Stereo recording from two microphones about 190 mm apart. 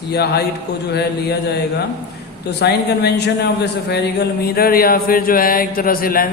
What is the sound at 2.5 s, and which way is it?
A man's voice, 60° left (ahead or behind).